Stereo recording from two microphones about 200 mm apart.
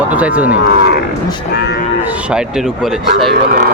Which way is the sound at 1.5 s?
55° left (ahead or behind).